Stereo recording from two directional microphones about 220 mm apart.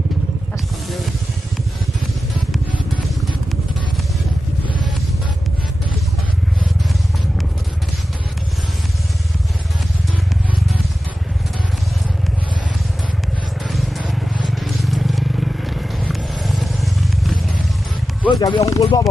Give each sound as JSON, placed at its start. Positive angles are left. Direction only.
{"t": 13.7, "sound": "vehicle", "side_deg": 0}
{"t": 18.3, "sound": "speech", "side_deg": 20}